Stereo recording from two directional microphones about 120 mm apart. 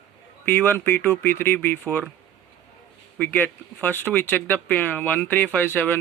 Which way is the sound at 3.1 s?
10° left (ahead or behind).